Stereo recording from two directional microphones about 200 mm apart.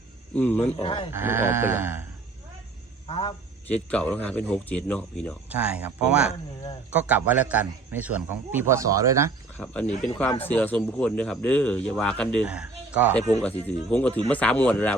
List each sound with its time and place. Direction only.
0.3 s speech: 10° left (ahead or behind)
0.8 s speech: 25° left (ahead or behind)
1.1 s a man's voice: 10° right (ahead or behind)
3.1 s speech: 25° left (ahead or behind)
3.8 s speech: 5° left (ahead or behind)
5.5 s a man's voice: 5° right (ahead or behind)
9.6 s speech: 5° left (ahead or behind)
12.5 s a man's voice: 5° right (ahead or behind)
13.4 s speech: 5° left (ahead or behind)